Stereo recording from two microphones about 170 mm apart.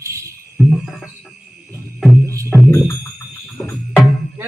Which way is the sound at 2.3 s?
15° right (ahead or behind).